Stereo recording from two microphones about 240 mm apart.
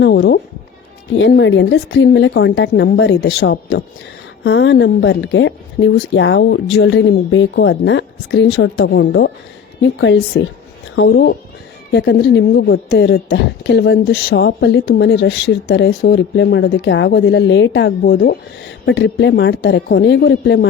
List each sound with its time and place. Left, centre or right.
0.0 s speech: left
18.9 s speech: left